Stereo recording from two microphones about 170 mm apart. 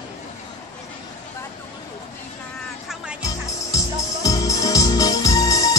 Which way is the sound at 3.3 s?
20° left (ahead or behind).